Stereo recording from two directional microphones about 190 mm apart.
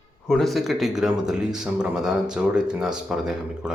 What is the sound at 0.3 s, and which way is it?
Speech, centre (ahead or behind).